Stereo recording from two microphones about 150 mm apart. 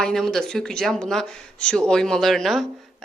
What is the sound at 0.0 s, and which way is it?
Speech, 5° left (ahead or behind).